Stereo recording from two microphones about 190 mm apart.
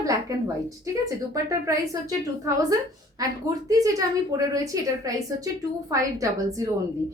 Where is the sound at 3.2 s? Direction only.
20° right (ahead or behind).